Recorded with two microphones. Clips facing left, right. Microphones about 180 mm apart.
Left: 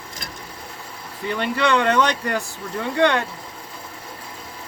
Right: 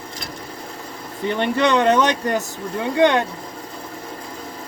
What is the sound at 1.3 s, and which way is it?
Speech, 20° right (ahead or behind).